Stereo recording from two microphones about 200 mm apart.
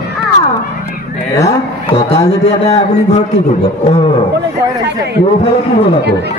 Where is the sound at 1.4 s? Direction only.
30° left (ahead or behind).